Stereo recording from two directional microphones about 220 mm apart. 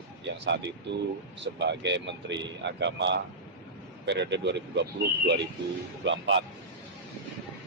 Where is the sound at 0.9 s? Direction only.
50° right (ahead or behind).